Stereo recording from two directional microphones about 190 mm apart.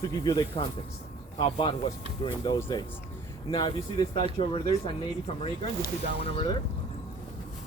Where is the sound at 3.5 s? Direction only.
25° left (ahead or behind).